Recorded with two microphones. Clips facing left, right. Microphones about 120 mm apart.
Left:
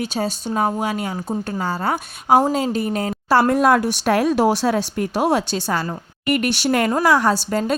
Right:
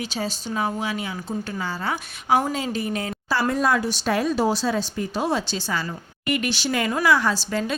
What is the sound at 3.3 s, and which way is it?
A woman's voice, 60° left (ahead or behind).